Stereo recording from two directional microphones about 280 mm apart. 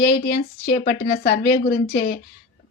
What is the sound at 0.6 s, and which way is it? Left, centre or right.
Speech, left.